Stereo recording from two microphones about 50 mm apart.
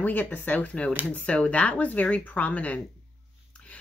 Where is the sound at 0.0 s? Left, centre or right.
Left.